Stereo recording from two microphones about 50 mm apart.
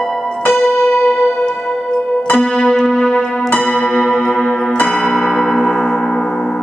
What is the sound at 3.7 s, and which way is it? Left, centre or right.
Church bell, left.